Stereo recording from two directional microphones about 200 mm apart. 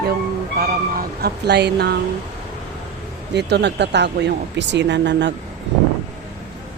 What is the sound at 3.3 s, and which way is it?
Speech, 60° right (ahead or behind).